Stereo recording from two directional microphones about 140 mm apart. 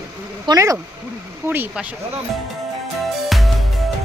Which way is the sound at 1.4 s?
15° right (ahead or behind).